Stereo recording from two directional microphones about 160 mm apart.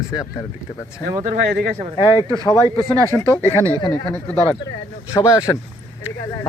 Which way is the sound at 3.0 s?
15° left (ahead or behind).